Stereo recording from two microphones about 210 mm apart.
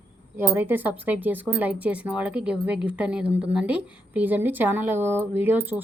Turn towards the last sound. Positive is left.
turn(degrees=-10)  # may be behind; listen again after turning